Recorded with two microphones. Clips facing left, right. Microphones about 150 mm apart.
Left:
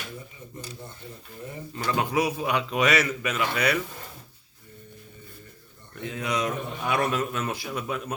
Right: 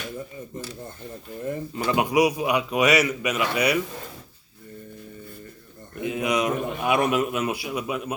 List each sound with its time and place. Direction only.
1.7 s a man's voice: 15° right (ahead or behind)
6.0 s a man's voice: 15° right (ahead or behind)